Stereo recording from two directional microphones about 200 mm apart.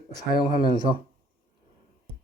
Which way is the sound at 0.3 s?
45° left (ahead or behind).